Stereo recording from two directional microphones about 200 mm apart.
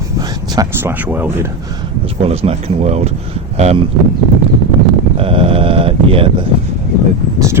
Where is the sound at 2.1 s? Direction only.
30° right (ahead or behind).